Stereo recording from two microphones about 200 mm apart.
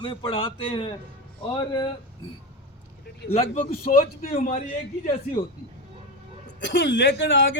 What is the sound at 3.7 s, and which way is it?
Speech, 45° left (ahead or behind).